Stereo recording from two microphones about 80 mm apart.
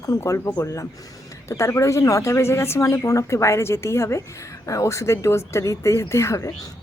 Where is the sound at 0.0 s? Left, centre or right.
Left.